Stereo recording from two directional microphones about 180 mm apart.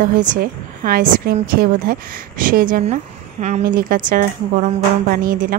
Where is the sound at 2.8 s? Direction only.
40° right (ahead or behind).